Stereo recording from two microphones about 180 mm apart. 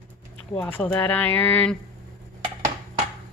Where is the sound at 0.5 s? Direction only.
10° left (ahead or behind).